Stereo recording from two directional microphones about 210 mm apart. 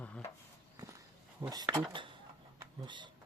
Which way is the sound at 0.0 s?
5° left (ahead or behind).